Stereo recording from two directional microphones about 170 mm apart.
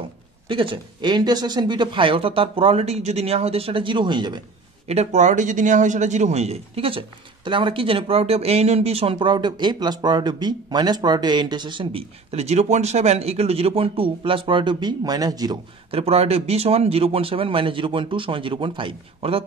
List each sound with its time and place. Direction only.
0.5 s a man's voice: 30° right (ahead or behind)
4.8 s a man's voice: 40° right (ahead or behind); by 15.6 s 25° right (ahead or behind)
15.9 s a man's voice: 35° right (ahead or behind)